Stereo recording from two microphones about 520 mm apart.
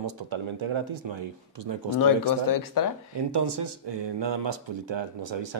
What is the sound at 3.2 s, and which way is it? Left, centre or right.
Speech, right.